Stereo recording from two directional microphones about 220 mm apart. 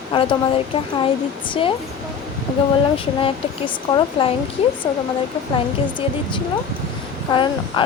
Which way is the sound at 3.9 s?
25° left (ahead or behind).